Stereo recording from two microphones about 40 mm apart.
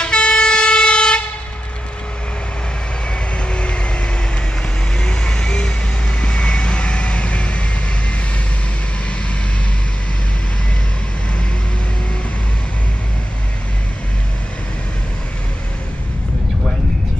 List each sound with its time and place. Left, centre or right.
0.0 s vehicle: left
3.4 s vehicle: left